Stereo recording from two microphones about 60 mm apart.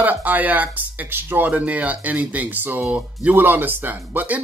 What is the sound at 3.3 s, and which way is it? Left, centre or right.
Speech, right.